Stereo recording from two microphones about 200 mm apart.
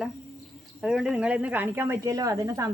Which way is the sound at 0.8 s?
Centre (ahead or behind).